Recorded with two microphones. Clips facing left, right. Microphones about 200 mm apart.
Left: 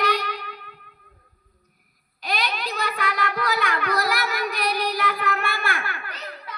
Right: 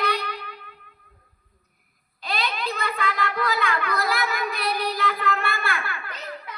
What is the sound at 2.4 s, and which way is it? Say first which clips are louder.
Child singing: even; 70° left (ahead or behind).